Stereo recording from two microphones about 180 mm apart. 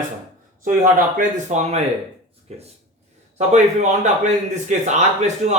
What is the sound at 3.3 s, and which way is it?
Speech, 40° right (ahead or behind).